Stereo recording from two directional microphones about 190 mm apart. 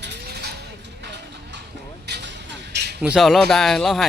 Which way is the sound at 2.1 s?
65° right (ahead or behind).